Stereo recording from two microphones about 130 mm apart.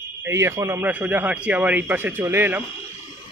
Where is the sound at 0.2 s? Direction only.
20° right (ahead or behind).